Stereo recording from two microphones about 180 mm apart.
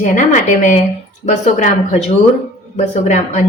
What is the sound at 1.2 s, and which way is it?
A woman's voice, 40° left (ahead or behind).